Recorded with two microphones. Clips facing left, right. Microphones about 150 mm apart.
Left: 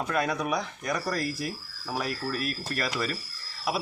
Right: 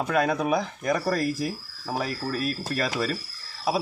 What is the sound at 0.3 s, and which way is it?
Speech, 30° right (ahead or behind).